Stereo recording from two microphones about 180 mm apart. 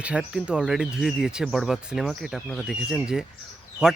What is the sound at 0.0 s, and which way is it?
Speech, 5° right (ahead or behind).